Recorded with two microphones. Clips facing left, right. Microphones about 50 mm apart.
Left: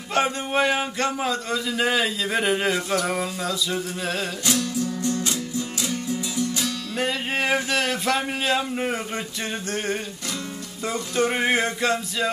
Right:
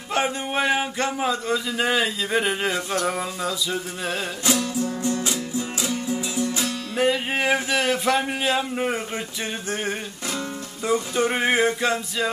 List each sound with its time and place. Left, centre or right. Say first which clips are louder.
0.1 s speech: left 1 dB; centre
4.5 s music: right 2 dB; centre
7.0 s speech: right 3 dB; centre
10.8 s speech: right 2 dB; centre